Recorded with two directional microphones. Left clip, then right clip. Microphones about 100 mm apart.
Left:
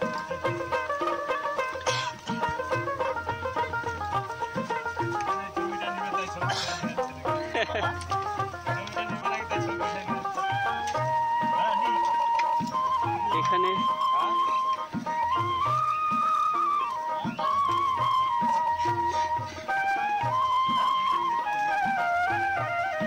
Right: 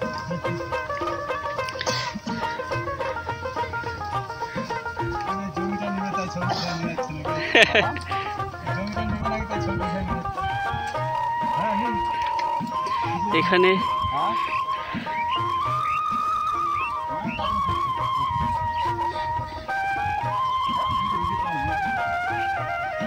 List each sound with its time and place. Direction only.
7.5 s music: 5° right (ahead or behind)
13.3 s speech: 5° right (ahead or behind)
19.7 s music: 30° left (ahead or behind)
21.6 s music: 35° left (ahead or behind)